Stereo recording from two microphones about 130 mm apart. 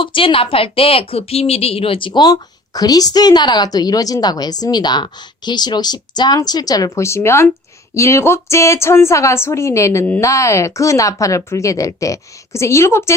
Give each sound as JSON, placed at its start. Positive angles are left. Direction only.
{"t": 0.0, "sound": "a woman's voice", "side_deg": 40}